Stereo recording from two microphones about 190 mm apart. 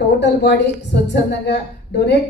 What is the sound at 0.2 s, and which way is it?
A woman's voice, 65° left (ahead or behind).